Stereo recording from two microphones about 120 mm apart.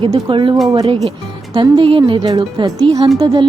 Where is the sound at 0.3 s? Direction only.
45° right (ahead or behind).